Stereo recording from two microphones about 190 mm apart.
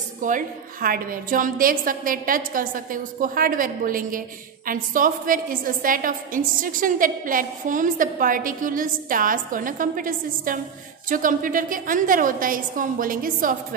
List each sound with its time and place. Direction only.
0.2 s a woman's voice: 45° right (ahead or behind)